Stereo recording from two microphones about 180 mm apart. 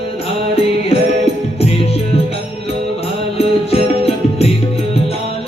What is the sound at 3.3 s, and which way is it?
Music, 35° left (ahead or behind).